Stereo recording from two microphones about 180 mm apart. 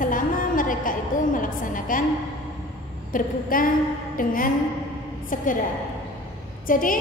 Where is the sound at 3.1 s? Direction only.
50° left (ahead or behind).